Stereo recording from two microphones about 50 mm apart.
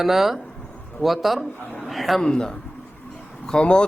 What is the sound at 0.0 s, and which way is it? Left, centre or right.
A man's voice, centre.